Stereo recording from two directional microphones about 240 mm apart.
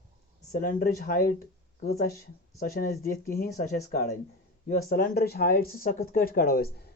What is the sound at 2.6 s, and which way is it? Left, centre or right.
Speech, left.